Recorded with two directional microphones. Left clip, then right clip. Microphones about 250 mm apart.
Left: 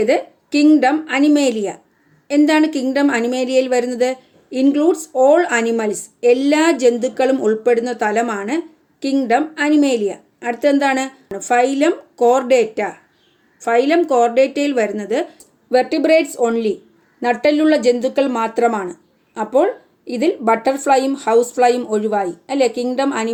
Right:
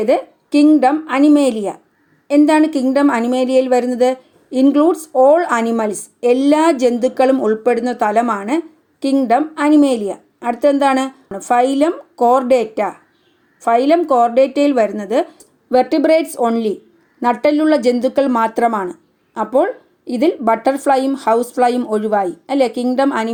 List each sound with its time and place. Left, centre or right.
0.0 s a woman's voice: centre